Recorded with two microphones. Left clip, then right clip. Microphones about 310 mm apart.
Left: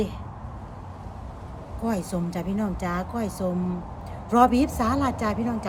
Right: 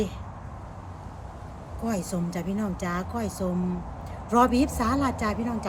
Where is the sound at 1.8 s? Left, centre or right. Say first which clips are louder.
Left 2 dB; centre.